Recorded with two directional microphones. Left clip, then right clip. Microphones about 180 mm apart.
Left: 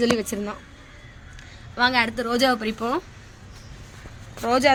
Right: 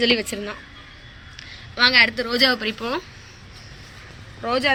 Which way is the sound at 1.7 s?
60° left (ahead or behind).